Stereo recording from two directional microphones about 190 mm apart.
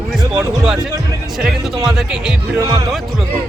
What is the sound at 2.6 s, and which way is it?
Speech, 15° right (ahead or behind).